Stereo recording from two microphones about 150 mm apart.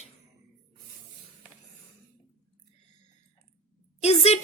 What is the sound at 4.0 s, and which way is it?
Speech, 45° left (ahead or behind).